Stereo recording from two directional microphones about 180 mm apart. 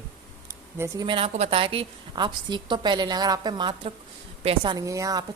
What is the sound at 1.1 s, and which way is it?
A woman's voice, 35° right (ahead or behind).